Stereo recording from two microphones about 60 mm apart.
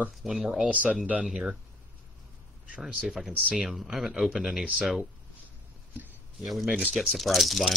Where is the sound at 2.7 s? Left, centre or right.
Centre.